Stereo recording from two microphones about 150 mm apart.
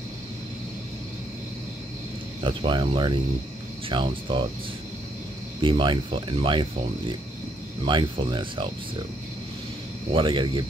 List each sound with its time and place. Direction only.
2.4 s speech: 35° right (ahead or behind)
5.6 s speech: 35° right (ahead or behind)
10.1 s speech: 35° right (ahead or behind)